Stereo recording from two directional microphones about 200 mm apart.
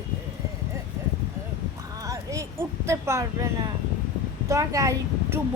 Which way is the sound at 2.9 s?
15° right (ahead or behind).